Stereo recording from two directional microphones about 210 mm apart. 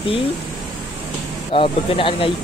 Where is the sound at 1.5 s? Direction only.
25° left (ahead or behind).